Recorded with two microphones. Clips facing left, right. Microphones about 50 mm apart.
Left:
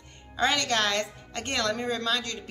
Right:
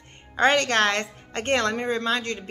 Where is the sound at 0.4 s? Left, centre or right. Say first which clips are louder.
Right 6 dB; right.